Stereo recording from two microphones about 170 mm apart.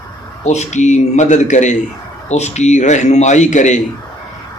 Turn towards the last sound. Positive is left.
turn(degrees=45)  # may be behind; listen again after turning